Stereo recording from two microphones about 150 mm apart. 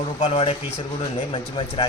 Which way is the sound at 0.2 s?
40° left (ahead or behind).